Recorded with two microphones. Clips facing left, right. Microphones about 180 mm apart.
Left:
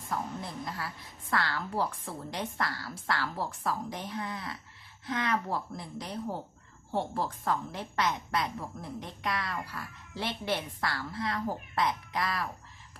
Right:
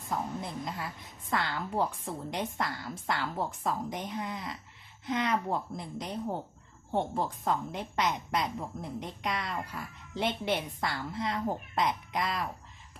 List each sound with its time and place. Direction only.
0.1 s a woman's voice: 20° right (ahead or behind)